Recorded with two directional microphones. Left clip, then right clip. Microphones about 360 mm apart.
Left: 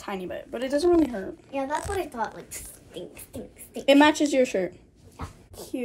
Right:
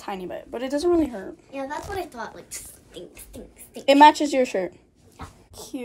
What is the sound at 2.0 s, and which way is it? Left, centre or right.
Speech, left.